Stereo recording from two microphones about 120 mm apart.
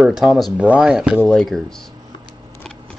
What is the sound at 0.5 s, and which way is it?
Speech, 10° right (ahead or behind).